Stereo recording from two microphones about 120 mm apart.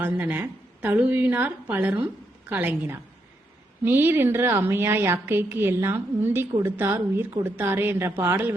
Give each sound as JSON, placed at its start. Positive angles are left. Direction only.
{"t": 0.0, "sound": "a woman's voice", "side_deg": -15}